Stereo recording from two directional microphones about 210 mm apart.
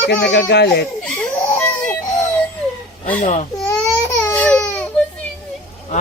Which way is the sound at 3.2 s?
35° left (ahead or behind).